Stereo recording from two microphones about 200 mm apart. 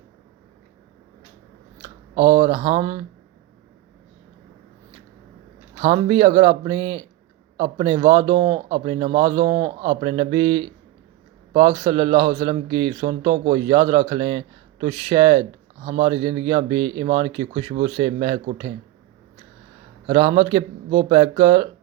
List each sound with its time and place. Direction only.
2.1 s a man's voice: 25° right (ahead or behind)
5.8 s a man's voice: 25° right (ahead or behind)
20.1 s a man's voice: 25° right (ahead or behind)